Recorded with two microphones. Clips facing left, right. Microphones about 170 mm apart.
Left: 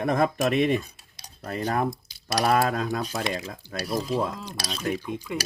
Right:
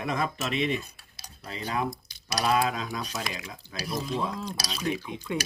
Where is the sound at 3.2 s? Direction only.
30° left (ahead or behind).